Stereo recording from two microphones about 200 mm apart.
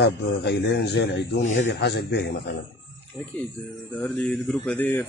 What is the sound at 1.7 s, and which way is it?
Speech, 55° left (ahead or behind).